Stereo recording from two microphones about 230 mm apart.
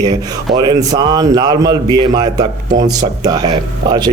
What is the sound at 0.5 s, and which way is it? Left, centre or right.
A man's voice, centre.